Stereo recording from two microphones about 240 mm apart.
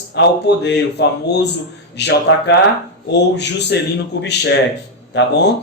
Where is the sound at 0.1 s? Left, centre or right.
Left.